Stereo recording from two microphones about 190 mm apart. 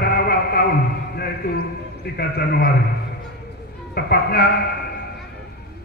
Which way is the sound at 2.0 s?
55° left (ahead or behind).